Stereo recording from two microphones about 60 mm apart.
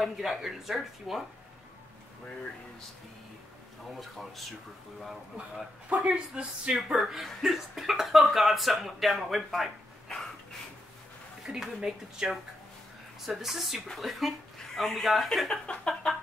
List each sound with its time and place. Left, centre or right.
0.0 s speech: centre
4.0 s speech: centre
6.0 s speech: centre
6.9 s speech: centre
11.4 s speech: centre
15.6 s a sound: centre
15.9 s speech: centre